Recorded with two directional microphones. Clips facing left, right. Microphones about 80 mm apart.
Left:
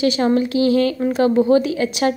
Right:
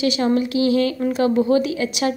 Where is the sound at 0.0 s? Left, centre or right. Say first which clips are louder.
Left 2 dB; left.